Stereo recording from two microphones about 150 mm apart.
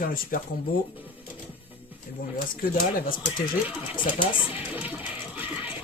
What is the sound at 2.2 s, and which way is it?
Speech, 70° left (ahead or behind).